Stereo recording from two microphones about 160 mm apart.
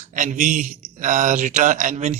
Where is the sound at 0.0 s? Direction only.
50° right (ahead or behind).